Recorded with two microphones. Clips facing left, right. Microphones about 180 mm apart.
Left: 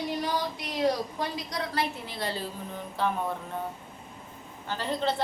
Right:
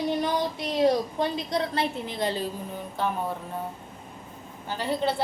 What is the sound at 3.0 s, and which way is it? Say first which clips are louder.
Music: even; centre (ahead or behind).